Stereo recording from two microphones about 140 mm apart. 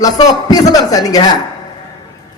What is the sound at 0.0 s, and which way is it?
Speech, 25° left (ahead or behind).